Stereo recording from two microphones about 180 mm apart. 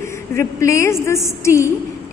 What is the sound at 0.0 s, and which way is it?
A woman's voice, 15° left (ahead or behind).